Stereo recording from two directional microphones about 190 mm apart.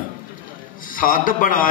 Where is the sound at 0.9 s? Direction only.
45° left (ahead or behind).